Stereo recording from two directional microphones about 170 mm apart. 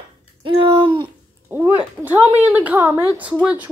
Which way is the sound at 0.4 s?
30° right (ahead or behind).